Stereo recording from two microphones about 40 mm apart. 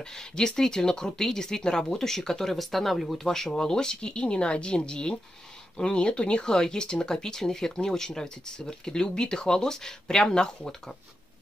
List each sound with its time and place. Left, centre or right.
0.0 s speech: centre